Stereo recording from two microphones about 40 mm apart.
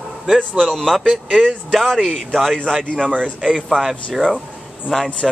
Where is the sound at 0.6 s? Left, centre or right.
Centre.